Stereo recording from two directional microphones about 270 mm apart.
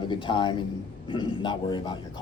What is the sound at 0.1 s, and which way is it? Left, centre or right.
A man's voice, centre.